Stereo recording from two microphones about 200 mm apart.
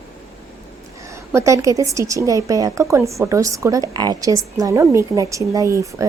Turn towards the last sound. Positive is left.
turn(degrees=-15)  # may be behind; listen again after turning